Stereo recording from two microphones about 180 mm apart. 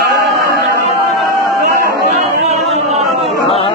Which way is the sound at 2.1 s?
35° right (ahead or behind).